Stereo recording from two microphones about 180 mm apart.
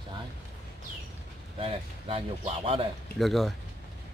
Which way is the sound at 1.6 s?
30° right (ahead or behind).